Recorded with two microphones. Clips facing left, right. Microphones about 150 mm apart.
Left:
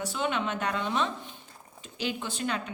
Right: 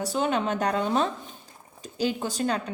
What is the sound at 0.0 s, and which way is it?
A woman's voice, 40° right (ahead or behind).